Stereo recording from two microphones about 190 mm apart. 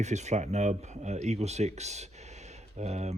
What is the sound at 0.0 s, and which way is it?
Speech, 35° right (ahead or behind).